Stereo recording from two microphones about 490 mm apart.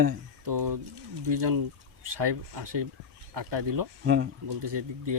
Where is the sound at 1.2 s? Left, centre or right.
Right.